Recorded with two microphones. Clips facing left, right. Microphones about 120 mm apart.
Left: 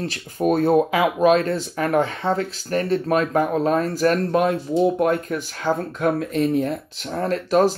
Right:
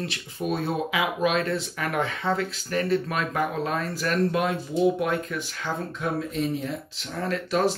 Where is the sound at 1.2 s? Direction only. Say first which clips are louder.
Left 8 dB; 35° left (ahead or behind).